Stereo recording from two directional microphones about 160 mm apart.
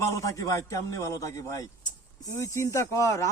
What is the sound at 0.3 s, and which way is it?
A man's voice, 20° left (ahead or behind).